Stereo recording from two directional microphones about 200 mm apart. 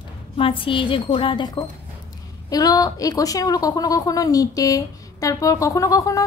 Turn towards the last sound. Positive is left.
turn(degrees=15)  # may be behind; listen again after turning